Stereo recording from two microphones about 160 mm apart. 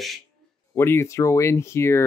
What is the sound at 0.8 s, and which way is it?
Speech, 15° left (ahead or behind).